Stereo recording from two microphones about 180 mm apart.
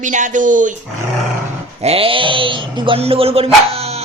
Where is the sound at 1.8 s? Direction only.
35° right (ahead or behind).